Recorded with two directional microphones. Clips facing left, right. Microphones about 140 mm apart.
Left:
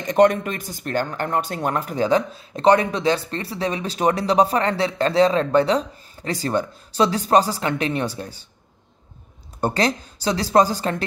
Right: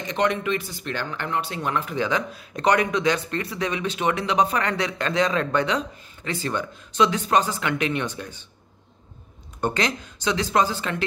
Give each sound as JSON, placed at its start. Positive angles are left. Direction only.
{"t": 0.0, "sound": "speech", "side_deg": 45}
{"t": 9.6, "sound": "speech", "side_deg": 35}